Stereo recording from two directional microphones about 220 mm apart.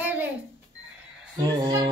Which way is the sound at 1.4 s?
20° right (ahead or behind).